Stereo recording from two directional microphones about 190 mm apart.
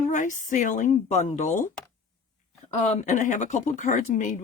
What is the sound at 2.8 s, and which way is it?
Speech, 40° left (ahead or behind).